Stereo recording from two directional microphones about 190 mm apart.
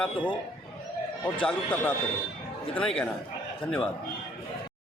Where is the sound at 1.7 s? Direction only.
10° left (ahead or behind).